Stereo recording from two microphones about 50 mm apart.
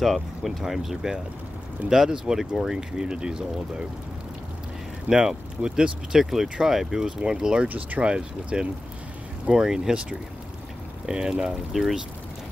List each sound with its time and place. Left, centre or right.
0.0 s speech: centre
3.0 s speech: centre
5.1 s speech: centre
7.6 s speech: right
8.0 s speech: centre
11.7 s speech: centre